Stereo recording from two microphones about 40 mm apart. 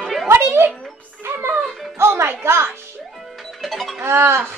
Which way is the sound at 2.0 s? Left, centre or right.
Right.